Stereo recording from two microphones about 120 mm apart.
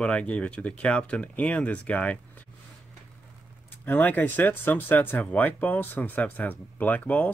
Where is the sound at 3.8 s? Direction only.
15° left (ahead or behind).